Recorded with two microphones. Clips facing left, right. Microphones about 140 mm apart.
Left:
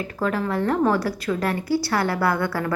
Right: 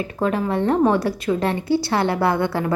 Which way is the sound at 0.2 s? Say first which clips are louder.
Right 3 dB; 20° right (ahead or behind).